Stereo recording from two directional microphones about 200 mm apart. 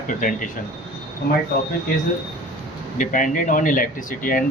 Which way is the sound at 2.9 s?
40° left (ahead or behind).